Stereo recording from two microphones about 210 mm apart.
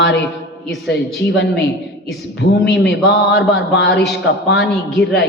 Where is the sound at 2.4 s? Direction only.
50° left (ahead or behind).